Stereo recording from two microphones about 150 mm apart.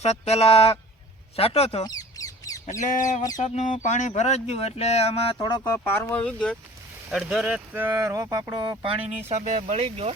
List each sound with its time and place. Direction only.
0.0 s speech: 45° left (ahead or behind)
1.8 s a sound: 25° left (ahead or behind)
2.7 s speech: 25° left (ahead or behind)
3.4 s speech: 55° left (ahead or behind); by 5.8 s 25° left (ahead or behind)
5.8 s speech: 15° left (ahead or behind); by 9.0 s 35° right (ahead or behind)
9.0 s speech: 50° right (ahead or behind)